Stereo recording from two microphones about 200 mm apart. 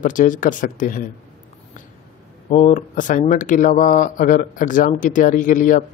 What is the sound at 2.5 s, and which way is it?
Speech, 40° left (ahead or behind).